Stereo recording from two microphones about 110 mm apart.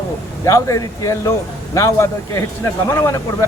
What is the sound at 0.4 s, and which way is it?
Speech, 30° left (ahead or behind).